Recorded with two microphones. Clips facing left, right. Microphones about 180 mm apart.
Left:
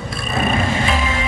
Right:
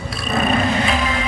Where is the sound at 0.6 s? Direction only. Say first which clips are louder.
Right 1 dB; 45° left (ahead or behind).